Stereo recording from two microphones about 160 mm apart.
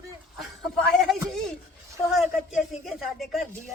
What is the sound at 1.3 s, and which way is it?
Speech, 5° left (ahead or behind).